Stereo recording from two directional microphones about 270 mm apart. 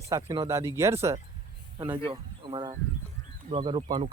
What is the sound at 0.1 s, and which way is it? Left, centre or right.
Speech, centre.